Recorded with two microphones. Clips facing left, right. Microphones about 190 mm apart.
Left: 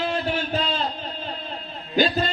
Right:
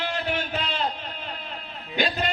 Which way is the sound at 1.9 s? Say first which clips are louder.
Left 5 dB; 35° left (ahead or behind).